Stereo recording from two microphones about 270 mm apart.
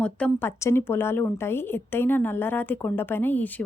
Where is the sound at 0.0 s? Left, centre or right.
Centre.